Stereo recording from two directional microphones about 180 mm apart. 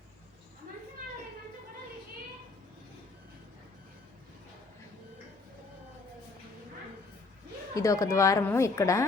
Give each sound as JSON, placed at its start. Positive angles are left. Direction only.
{"t": 7.7, "sound": "speech", "side_deg": 20}